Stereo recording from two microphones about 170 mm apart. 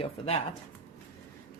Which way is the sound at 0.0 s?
35° left (ahead or behind).